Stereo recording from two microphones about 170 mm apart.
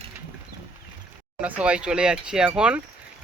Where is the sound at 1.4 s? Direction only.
10° right (ahead or behind).